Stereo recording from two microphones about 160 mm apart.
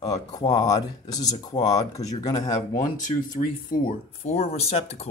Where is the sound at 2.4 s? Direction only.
50° left (ahead or behind).